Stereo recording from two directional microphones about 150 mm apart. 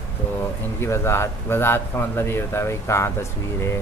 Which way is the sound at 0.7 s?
15° left (ahead or behind).